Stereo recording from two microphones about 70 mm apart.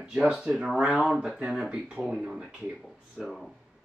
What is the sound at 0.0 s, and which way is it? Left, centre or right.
Speech, centre.